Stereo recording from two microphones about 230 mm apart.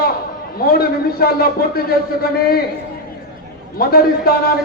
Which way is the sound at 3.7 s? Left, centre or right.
Left.